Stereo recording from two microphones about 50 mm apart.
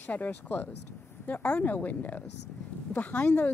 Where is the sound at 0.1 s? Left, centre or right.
Left.